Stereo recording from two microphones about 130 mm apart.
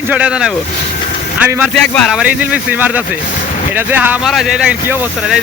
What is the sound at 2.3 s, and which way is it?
Speech, 10° right (ahead or behind).